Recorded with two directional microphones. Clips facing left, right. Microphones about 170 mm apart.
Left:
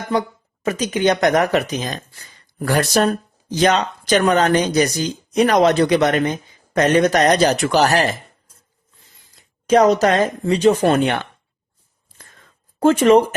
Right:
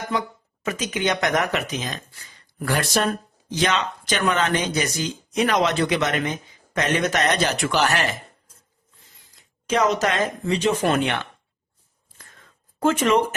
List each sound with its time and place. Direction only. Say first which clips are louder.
0.1 s speech: left 8 dB; 35° left (ahead or behind)
9.6 s speech: left 7 dB; 40° left (ahead or behind)
12.8 s speech: left 7 dB; 35° left (ahead or behind)